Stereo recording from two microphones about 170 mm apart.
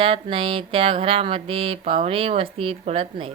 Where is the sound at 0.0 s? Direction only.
30° right (ahead or behind).